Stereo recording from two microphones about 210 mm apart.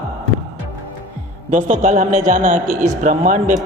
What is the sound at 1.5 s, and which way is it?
A man's voice, 35° right (ahead or behind).